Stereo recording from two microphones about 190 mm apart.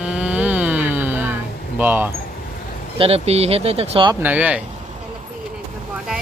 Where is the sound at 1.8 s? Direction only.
10° right (ahead or behind).